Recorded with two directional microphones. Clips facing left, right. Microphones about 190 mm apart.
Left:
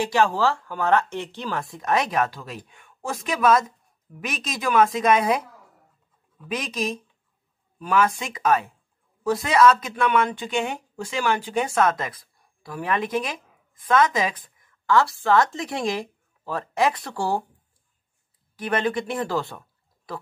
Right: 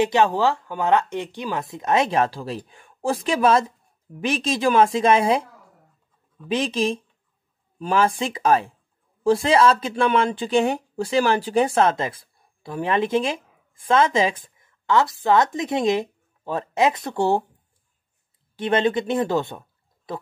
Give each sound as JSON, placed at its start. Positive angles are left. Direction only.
{"t": 0.0, "sound": "speech", "side_deg": -20}
{"t": 18.6, "sound": "speech", "side_deg": -25}